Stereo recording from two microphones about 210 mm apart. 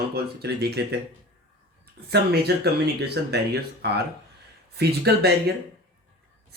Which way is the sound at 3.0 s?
50° right (ahead or behind).